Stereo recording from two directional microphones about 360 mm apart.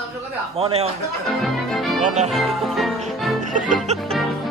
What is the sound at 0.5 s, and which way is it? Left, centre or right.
Speech, centre.